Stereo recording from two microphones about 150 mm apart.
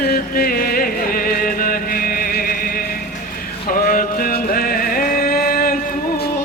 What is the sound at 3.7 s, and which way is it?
Music, 70° left (ahead or behind).